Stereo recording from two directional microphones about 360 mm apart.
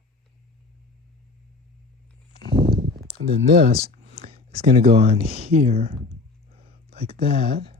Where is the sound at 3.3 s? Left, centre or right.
Centre.